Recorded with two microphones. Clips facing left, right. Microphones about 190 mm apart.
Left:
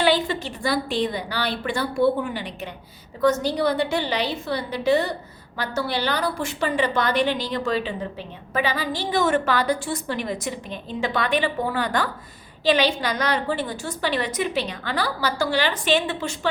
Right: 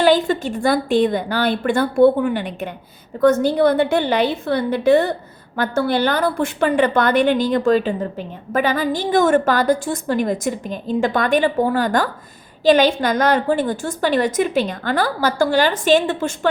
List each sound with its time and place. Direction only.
0.0 s a woman's voice: 45° right (ahead or behind)